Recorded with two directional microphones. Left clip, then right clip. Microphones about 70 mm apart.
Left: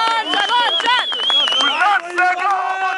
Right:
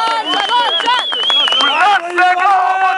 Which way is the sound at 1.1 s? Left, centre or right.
Right.